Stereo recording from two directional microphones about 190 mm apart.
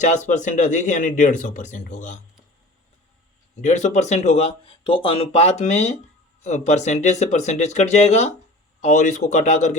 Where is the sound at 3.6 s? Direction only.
40° left (ahead or behind).